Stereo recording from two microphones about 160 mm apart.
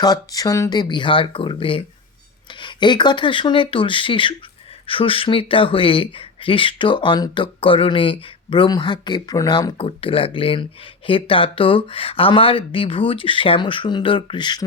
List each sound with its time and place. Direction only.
0.0 s speech: 25° left (ahead or behind)